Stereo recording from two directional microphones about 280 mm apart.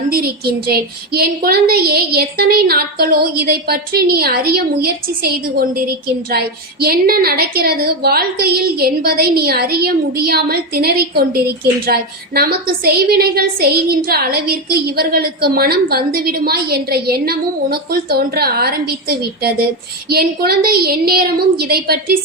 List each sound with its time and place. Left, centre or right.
0.1 s a woman's voice: right